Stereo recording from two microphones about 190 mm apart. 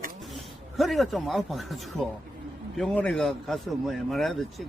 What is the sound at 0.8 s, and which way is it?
A man's voice, centre (ahead or behind).